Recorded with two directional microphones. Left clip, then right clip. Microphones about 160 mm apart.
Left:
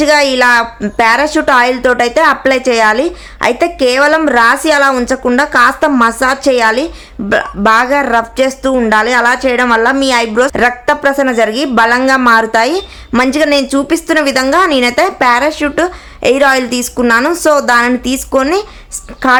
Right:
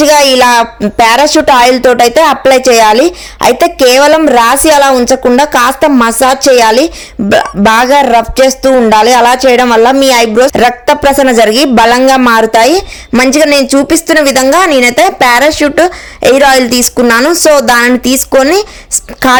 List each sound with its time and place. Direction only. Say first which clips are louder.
0.0 s a woman's voice: right 4 dB; 35° right (ahead or behind)